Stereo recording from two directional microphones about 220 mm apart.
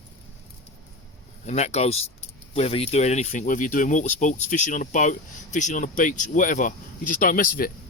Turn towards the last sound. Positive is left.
turn(degrees=40)  # may be behind; listen again after turning